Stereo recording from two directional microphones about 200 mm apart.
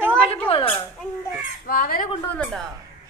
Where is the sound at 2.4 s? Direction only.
Centre (ahead or behind).